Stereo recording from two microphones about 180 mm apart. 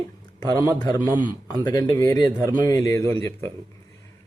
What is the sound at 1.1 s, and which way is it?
Speech, 25° left (ahead or behind).